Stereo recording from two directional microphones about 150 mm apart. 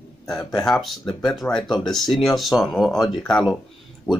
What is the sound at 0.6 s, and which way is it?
Speech, centre (ahead or behind).